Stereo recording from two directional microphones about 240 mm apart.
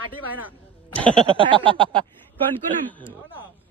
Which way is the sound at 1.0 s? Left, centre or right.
Right.